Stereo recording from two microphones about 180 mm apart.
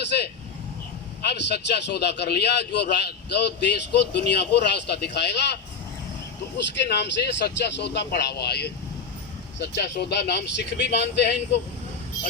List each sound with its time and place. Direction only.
1.2 s a man's voice: 65° left (ahead or behind)
6.6 s a man's voice: 70° left (ahead or behind)